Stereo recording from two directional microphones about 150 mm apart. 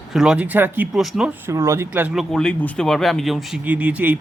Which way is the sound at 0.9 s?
Centre (ahead or behind).